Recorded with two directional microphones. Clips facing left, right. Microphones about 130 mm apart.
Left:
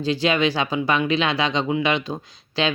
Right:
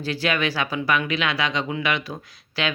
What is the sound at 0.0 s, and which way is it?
Speech, 20° left (ahead or behind).